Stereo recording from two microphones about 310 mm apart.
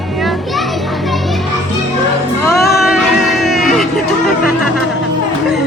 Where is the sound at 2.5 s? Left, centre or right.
Centre.